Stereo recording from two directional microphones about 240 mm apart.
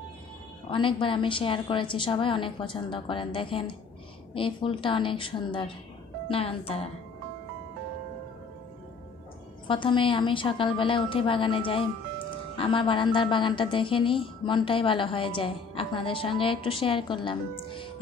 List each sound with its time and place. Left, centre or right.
0.7 s a woman's voice: left
9.7 s a woman's voice: left